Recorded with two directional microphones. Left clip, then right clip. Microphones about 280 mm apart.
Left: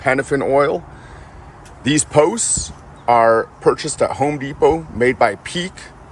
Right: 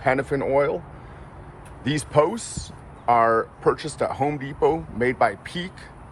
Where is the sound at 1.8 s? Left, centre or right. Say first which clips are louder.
Left 6 dB; centre.